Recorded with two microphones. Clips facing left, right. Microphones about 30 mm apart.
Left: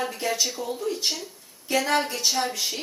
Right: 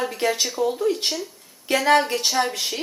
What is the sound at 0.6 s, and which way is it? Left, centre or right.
A woman's voice, right.